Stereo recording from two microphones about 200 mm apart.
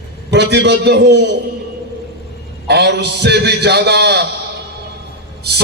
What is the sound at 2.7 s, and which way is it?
Music, 55° right (ahead or behind).